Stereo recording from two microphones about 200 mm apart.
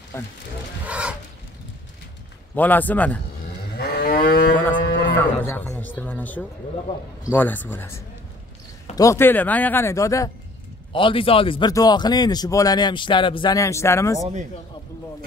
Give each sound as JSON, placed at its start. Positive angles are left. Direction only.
{"t": 0.1, "sound": "speech", "side_deg": 10}
{"t": 0.8, "sound": "a sound", "side_deg": -5}
{"t": 2.5, "sound": "speech", "side_deg": 10}
{"t": 3.7, "sound": "livestock", "side_deg": 55}
{"t": 5.1, "sound": "music", "side_deg": 10}
{"t": 7.3, "sound": "a man's voice", "side_deg": 10}